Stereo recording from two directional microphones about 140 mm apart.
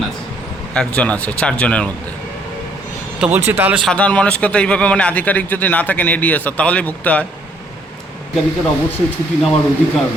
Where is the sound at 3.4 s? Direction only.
15° right (ahead or behind).